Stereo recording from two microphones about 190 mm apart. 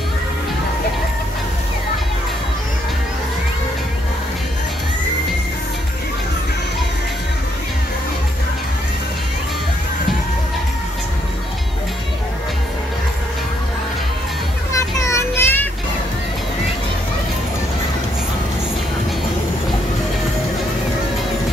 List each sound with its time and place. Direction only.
14.7 s children playing: 15° left (ahead or behind)